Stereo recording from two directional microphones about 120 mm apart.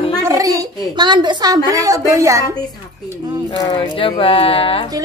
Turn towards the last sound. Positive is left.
turn(degrees=50)  # may be behind; listen again after turning